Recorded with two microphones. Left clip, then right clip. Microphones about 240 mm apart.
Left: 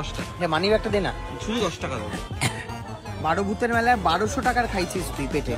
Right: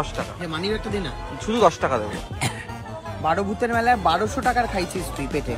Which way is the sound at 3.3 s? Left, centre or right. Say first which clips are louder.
Right 1 dB; centre.